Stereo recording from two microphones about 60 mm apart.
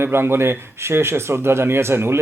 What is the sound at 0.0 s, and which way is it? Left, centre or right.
Speech, right.